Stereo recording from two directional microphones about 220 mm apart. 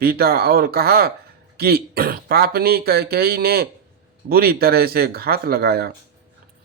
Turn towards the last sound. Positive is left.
turn(degrees=-45)  # may be behind; listen again after turning